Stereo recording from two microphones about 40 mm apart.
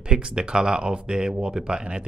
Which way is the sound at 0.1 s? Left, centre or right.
Right.